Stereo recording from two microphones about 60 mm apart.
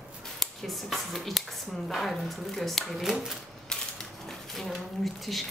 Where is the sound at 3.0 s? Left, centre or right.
Centre.